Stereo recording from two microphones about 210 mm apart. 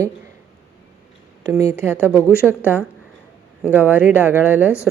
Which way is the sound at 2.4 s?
5° left (ahead or behind).